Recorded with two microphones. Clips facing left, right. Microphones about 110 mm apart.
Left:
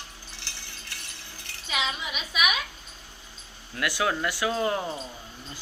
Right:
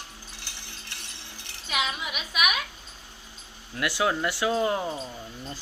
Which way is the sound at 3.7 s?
25° right (ahead or behind).